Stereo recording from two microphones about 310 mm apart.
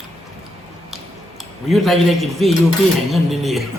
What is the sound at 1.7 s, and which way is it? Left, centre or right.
Speech, centre.